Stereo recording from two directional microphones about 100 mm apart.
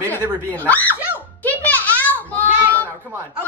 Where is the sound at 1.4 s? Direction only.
15° left (ahead or behind).